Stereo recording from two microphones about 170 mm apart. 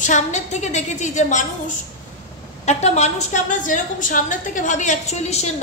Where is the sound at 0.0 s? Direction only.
45° left (ahead or behind).